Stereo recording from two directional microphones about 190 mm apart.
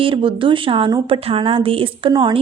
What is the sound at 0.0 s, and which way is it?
A woman's voice, 25° right (ahead or behind).